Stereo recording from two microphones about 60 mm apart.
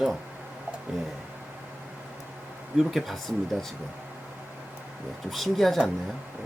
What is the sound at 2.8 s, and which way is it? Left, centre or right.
Speech, centre.